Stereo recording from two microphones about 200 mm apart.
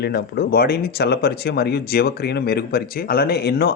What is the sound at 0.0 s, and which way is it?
Speech, 50° left (ahead or behind).